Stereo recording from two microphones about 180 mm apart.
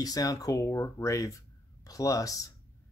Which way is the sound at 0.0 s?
20° left (ahead or behind).